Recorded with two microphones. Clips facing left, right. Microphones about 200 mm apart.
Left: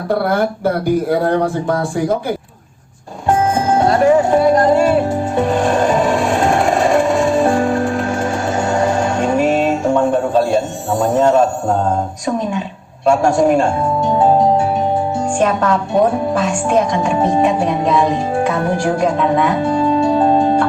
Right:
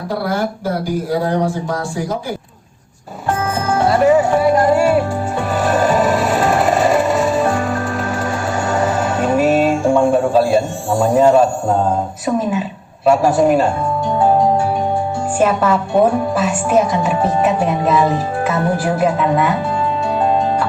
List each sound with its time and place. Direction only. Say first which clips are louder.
0.1 s speech: left 4 dB; 60° left (ahead or behind)
3.8 s speech: right 1 dB; 5° right (ahead or behind)
5.5 s music: right 1 dB; 5° right (ahead or behind)
9.1 s music: right 4 dB; 5° right (ahead or behind)
11.0 s speech: right 1 dB; 10° right (ahead or behind)
13.1 s speech: even; 5° right (ahead or behind)
15.4 s speech: right 2 dB; 5° right (ahead or behind)